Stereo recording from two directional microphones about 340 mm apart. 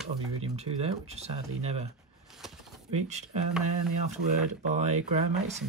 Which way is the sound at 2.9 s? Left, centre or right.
Centre.